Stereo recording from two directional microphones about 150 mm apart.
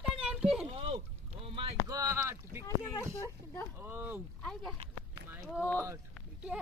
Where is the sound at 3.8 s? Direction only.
15° right (ahead or behind).